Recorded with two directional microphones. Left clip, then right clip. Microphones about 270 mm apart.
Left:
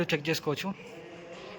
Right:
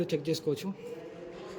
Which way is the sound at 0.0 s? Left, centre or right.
Centre.